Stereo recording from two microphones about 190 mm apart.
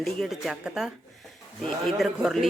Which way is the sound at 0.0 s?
Centre (ahead or behind).